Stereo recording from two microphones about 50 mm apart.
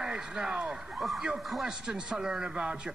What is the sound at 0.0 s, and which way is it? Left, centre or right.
A man's voice, centre.